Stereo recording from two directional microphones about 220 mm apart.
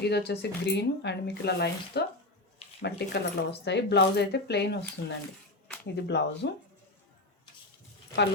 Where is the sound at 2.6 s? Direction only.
25° left (ahead or behind).